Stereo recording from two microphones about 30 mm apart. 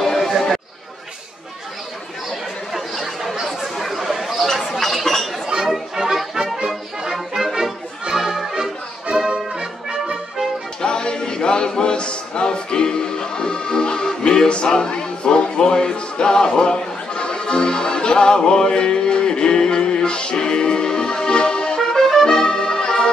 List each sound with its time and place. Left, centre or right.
0.0 s chatter: centre
0.3 s chatter: centre
3.4 s chatter: centre
6.0 s music: right
9.1 s brass instrument: right
9.5 s music: right
10.8 s music: left
21.9 s music: centre